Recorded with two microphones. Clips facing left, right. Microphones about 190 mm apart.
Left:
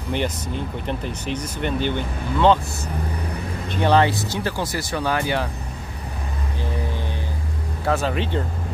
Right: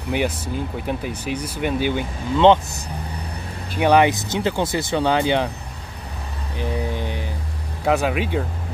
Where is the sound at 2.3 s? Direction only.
20° right (ahead or behind).